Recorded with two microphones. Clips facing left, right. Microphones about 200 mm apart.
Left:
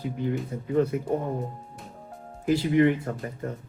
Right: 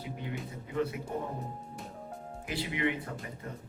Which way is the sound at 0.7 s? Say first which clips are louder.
Left 9 dB; 45° left (ahead or behind).